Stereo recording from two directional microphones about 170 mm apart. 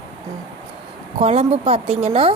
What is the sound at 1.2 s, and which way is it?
Speech, 35° right (ahead or behind).